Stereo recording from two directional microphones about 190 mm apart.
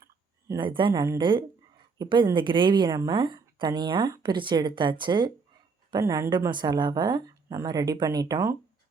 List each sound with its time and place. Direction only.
0.6 s a woman's voice: 25° right (ahead or behind)